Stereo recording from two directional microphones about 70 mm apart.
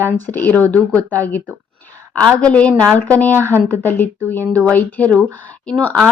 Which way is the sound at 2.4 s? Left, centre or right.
Centre.